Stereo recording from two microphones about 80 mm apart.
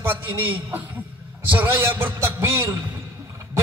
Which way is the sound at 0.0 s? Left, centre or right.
Right.